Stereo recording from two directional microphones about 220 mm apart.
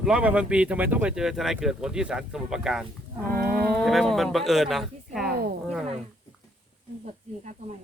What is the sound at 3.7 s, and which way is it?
Speech, centre (ahead or behind).